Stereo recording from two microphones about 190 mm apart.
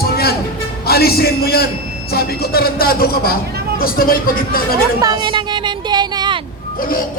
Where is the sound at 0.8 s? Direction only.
55° left (ahead or behind).